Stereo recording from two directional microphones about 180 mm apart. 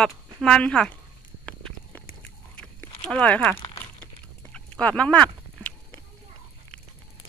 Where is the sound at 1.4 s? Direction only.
5° left (ahead or behind).